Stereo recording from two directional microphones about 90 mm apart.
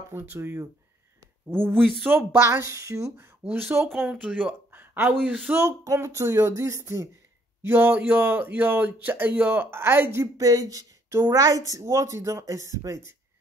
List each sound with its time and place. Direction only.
0.1 s speech: 25° right (ahead or behind)
2.3 s speech: 30° right (ahead or behind)
3.4 s speech: 25° right (ahead or behind)
4.1 s speech: 15° right (ahead or behind)
5.5 s speech: 30° right (ahead or behind)